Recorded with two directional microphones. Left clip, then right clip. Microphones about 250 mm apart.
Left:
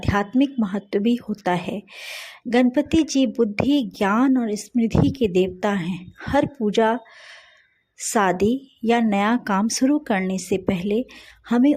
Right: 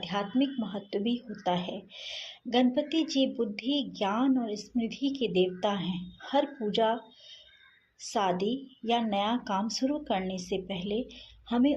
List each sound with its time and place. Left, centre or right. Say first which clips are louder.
0.0 s speech: left 9 dB; left
8.1 s speech: left 9 dB; left